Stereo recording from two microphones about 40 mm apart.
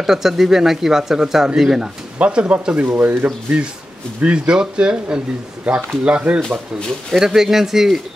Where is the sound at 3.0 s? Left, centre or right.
Right.